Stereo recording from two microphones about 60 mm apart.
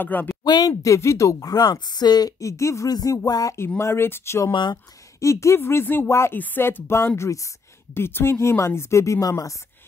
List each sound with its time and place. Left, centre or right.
0.0 s speech: left
0.6 s speech: left
0.9 s speech: left
1.4 s speech: left
2.5 s speech: left
2.9 s speech: left
3.5 s speech: left
6.0 s speech: left
6.3 s speech: left
7.2 s speech: left
7.9 s speech: left